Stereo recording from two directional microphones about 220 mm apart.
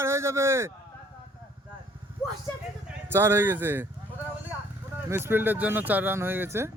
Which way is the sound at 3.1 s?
10° right (ahead or behind).